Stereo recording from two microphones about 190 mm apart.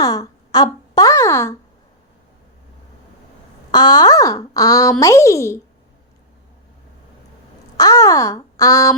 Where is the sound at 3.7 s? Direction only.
20° left (ahead or behind).